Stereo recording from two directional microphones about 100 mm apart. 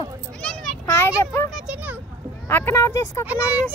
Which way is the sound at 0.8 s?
25° left (ahead or behind).